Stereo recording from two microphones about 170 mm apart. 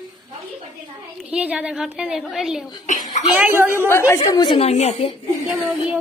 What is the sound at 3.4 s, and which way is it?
Speech, 15° right (ahead or behind).